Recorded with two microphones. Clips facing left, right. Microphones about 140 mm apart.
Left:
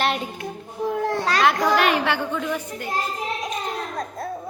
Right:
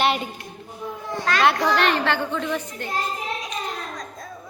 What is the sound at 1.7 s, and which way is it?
A woman's voice, 5° left (ahead or behind).